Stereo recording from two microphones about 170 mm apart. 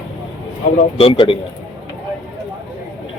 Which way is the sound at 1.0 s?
30° left (ahead or behind).